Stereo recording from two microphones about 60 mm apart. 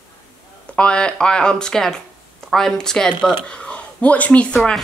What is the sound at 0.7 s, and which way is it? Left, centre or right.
Speech, centre.